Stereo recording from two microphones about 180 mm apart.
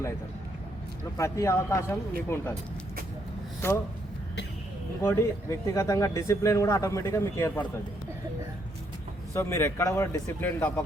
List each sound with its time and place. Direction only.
1.1 s speech: 15° left (ahead or behind)
3.6 s speech: 15° left (ahead or behind)
5.0 s speech: 15° left (ahead or behind)
9.3 s speech: 15° left (ahead or behind)